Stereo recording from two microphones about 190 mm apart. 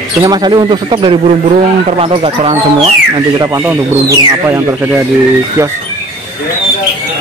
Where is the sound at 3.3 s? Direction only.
20° right (ahead or behind).